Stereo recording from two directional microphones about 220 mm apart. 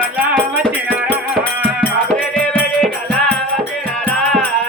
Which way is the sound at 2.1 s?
5° left (ahead or behind).